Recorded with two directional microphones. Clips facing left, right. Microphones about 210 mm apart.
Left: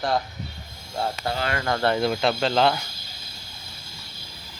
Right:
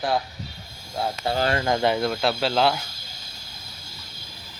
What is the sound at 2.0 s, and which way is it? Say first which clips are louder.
Speech: left 1 dB; centre (ahead or behind).